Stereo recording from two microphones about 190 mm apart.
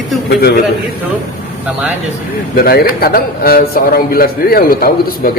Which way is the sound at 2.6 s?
55° left (ahead or behind).